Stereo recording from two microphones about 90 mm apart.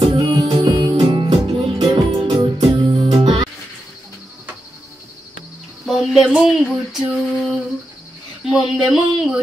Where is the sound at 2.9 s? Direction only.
65° right (ahead or behind).